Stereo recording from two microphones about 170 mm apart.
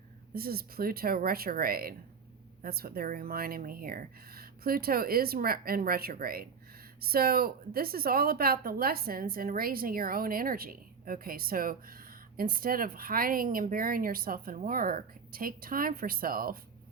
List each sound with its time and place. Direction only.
0.3 s a woman's voice: 60° right (ahead or behind)